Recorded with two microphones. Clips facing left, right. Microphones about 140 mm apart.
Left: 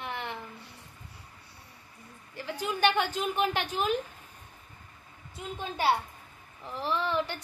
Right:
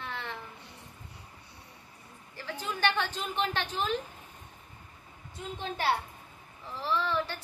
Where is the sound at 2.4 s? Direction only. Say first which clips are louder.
Left 4 dB; 15° left (ahead or behind).